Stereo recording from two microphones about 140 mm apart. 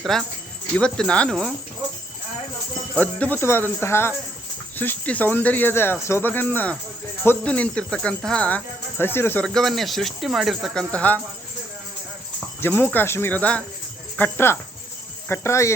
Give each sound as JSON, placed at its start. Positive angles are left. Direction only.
{"t": 0.0, "sound": "speech", "side_deg": 0}
{"t": 3.0, "sound": "speech", "side_deg": 10}
{"t": 9.4, "sound": "speech", "side_deg": 5}
{"t": 10.9, "sound": "speech", "side_deg": 10}
{"t": 12.5, "sound": "speech", "side_deg": 15}